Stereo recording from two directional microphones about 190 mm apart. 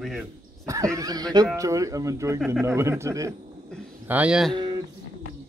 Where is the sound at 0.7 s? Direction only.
15° right (ahead or behind).